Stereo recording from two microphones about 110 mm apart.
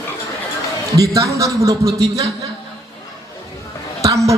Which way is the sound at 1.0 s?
30° right (ahead or behind).